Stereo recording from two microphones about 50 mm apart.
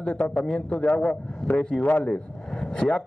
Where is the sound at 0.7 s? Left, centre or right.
Centre.